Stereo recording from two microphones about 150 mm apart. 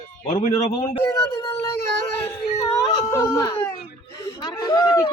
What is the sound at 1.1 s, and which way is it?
Speech, 20° left (ahead or behind).